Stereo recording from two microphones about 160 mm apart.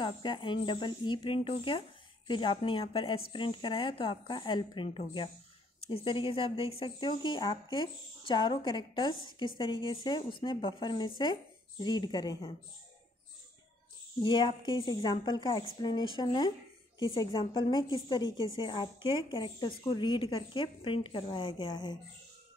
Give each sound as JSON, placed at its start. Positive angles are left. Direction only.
{"t": 0.0, "sound": "a woman's voice", "side_deg": 30}
{"t": 14.2, "sound": "a woman's voice", "side_deg": 30}